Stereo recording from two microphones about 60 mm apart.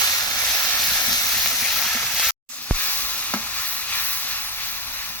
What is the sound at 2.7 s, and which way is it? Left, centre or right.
Sizzle, left.